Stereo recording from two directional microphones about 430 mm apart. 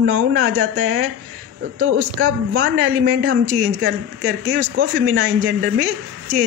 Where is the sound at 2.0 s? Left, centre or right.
Right.